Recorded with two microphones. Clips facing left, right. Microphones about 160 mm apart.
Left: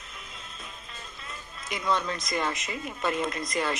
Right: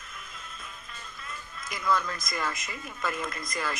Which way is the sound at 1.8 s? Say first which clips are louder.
Even; 25° left (ahead or behind).